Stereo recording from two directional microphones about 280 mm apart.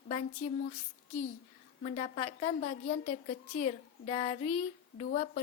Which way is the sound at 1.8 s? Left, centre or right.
Left.